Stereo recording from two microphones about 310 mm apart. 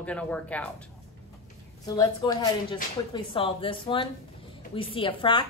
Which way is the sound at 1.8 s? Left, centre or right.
Centre.